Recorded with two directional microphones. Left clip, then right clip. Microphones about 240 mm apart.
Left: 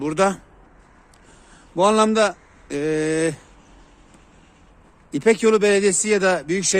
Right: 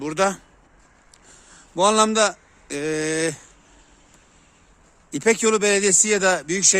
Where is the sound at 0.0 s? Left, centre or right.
Centre.